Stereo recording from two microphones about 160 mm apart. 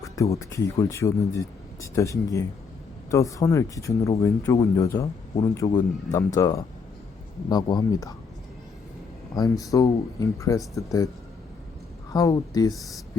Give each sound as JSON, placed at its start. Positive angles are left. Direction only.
{"t": 0.0, "sound": "speech", "side_deg": 20}
{"t": 9.3, "sound": "speech", "side_deg": 25}
{"t": 12.1, "sound": "speech", "side_deg": 25}